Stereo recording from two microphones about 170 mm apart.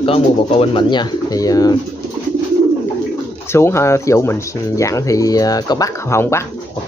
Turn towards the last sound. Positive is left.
turn(degrees=15)  # may be behind; listen again after turning